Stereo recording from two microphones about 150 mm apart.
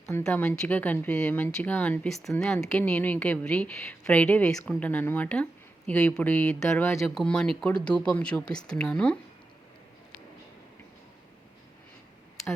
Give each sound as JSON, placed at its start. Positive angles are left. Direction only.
{"t": 0.2, "sound": "a woman's voice", "side_deg": 5}